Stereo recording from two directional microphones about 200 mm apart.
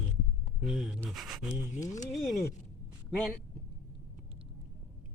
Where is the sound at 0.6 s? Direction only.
5° right (ahead or behind).